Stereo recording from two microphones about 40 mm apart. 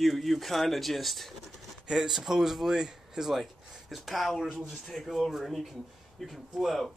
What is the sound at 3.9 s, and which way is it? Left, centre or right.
Speech, centre.